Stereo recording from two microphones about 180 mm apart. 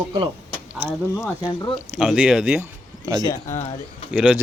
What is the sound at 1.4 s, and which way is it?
Speech, 25° left (ahead or behind).